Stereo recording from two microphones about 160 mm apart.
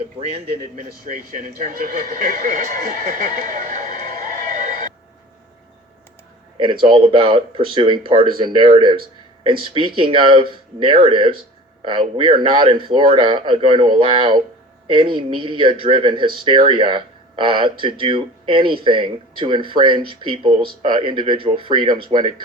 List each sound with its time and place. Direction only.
0.2 s speech: 35° right (ahead or behind)
0.8 s speech: 60° right (ahead or behind)
6.8 s speech: 30° right (ahead or behind)